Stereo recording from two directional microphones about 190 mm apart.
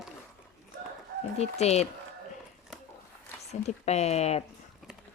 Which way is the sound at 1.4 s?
35° left (ahead or behind).